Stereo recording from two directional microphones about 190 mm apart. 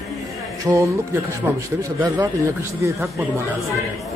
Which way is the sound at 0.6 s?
15° right (ahead or behind).